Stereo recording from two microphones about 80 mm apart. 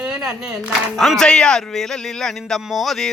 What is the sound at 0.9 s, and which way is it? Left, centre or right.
A man's voice, centre.